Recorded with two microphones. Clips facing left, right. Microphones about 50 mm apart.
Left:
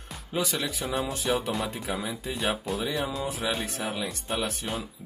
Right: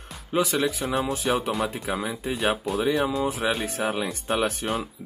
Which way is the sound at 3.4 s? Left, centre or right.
Right.